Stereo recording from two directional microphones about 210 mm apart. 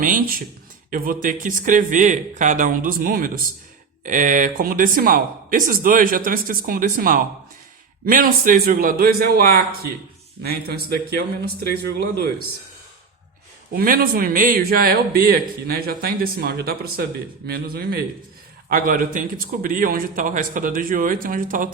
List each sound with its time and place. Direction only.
0.0 s a man's voice: 40° right (ahead or behind)
13.7 s a man's voice: 45° right (ahead or behind)